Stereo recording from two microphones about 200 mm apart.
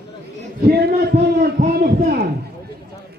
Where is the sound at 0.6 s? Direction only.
50° right (ahead or behind).